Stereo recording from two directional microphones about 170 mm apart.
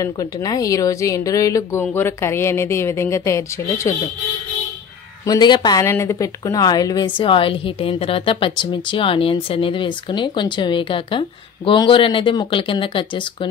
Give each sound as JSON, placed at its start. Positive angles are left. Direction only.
{"t": 0.0, "sound": "a woman's voice", "side_deg": 20}
{"t": 5.2, "sound": "speech", "side_deg": 25}